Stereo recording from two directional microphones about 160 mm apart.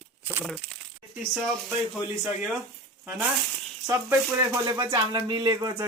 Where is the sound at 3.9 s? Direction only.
15° right (ahead or behind).